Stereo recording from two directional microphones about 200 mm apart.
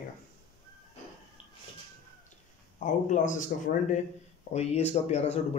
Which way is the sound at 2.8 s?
40° left (ahead or behind).